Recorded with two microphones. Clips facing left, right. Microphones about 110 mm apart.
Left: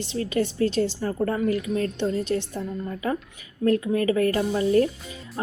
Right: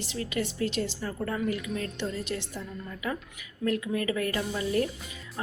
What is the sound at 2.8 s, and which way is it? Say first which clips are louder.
A woman's voice: left 4 dB; 35° left (ahead or behind).